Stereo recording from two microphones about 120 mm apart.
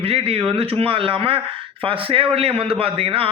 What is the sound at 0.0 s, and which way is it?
A man's voice, 55° right (ahead or behind).